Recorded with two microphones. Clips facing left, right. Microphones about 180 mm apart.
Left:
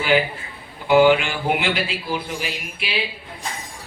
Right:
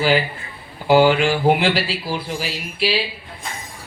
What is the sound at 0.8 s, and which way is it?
A woman's voice, 35° right (ahead or behind).